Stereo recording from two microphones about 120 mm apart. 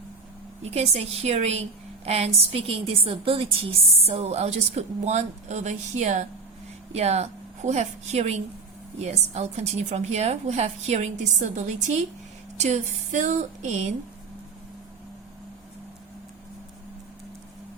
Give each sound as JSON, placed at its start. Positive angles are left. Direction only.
{"t": 0.6, "sound": "a woman's voice", "side_deg": -60}
{"t": 6.9, "sound": "a woman's voice", "side_deg": -65}
{"t": 12.5, "sound": "a woman's voice", "side_deg": -70}